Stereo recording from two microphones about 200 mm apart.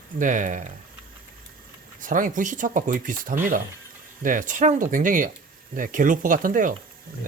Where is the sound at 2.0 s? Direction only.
40° right (ahead or behind).